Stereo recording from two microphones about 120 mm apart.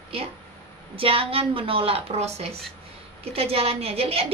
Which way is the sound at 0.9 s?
50° right (ahead or behind).